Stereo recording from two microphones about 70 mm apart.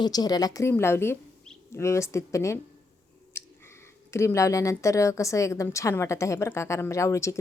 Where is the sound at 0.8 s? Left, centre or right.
Left.